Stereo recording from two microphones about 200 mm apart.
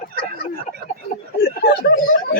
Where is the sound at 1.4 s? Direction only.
55° left (ahead or behind).